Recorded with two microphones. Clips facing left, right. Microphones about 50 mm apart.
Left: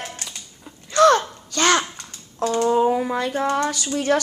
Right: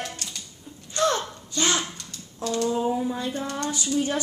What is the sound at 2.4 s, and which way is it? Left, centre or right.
Typing, left.